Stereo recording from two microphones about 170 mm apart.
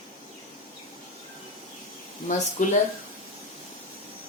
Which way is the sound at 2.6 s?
50° left (ahead or behind).